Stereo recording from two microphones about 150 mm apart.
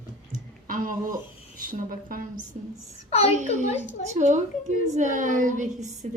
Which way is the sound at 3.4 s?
55° right (ahead or behind).